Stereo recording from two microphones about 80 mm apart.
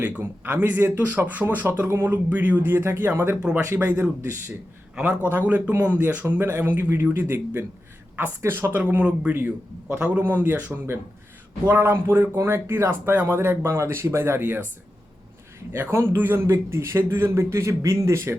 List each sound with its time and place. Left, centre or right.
0.2 s a man's voice: right
15.7 s a man's voice: right